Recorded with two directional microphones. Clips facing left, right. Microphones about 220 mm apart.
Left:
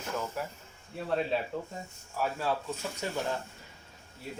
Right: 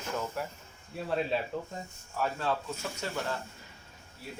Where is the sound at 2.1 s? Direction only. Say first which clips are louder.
Even; 10° left (ahead or behind).